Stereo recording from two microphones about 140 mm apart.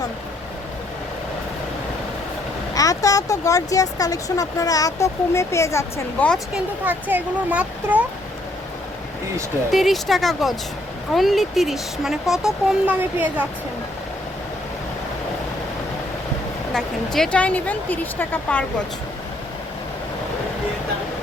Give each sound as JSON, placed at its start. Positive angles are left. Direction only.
{"t": 2.7, "sound": "speech", "side_deg": 25}
{"t": 6.8, "sound": "speech", "side_deg": -10}
{"t": 9.7, "sound": "speech", "side_deg": 0}
{"t": 16.7, "sound": "speech", "side_deg": 5}